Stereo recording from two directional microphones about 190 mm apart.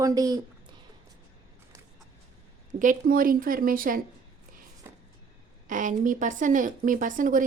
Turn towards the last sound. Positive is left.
turn(degrees=-45)  # may be behind; listen again after turning